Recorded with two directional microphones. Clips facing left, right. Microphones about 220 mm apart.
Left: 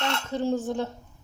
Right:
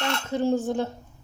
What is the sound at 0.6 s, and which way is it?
Speech, 10° right (ahead or behind).